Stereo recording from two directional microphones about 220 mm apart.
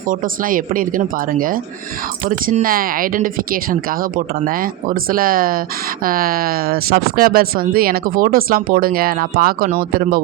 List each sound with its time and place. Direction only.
0.1 s speech: 40° right (ahead or behind)